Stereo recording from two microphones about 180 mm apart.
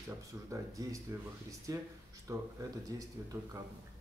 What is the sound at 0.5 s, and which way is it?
Speech, 20° right (ahead or behind).